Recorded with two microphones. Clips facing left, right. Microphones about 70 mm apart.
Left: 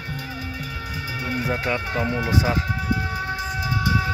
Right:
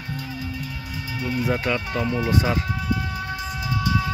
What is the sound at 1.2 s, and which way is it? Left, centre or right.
Speech, left.